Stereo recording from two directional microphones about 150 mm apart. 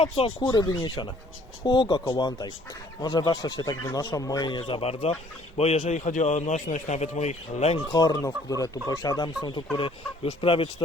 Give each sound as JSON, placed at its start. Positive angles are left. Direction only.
{"t": 0.0, "sound": "speech", "side_deg": 40}
{"t": 0.5, "sound": "speech", "side_deg": 30}
{"t": 4.6, "sound": "a man's voice", "side_deg": 40}
{"t": 7.9, "sound": "speech", "side_deg": 25}